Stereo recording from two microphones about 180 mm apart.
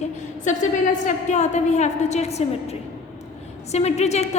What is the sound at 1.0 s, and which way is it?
A woman's voice, 40° left (ahead or behind).